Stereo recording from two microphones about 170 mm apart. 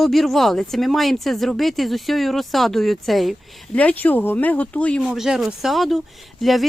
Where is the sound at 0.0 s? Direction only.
Centre (ahead or behind).